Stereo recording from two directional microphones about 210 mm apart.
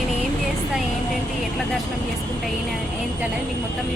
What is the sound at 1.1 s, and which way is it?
Vehicle, centre (ahead or behind).